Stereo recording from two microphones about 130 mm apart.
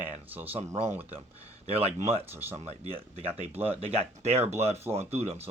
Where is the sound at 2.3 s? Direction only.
20° right (ahead or behind).